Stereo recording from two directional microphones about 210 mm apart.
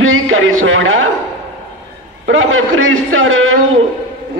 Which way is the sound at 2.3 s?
75° right (ahead or behind).